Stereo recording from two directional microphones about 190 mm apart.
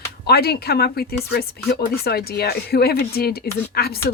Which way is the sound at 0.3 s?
55° left (ahead or behind).